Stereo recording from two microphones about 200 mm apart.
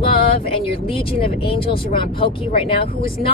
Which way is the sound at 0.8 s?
25° left (ahead or behind).